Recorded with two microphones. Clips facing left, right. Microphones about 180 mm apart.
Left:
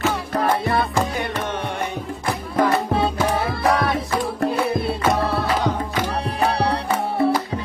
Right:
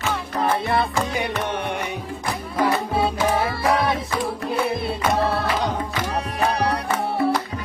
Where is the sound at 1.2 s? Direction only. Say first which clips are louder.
Even; 15° right (ahead or behind).